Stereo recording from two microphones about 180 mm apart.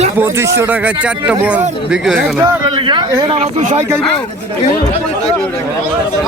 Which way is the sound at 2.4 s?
25° right (ahead or behind).